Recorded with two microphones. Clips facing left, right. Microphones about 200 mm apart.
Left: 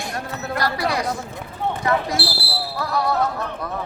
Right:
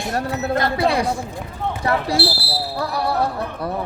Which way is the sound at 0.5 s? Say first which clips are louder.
Right 3 dB; 25° right (ahead or behind).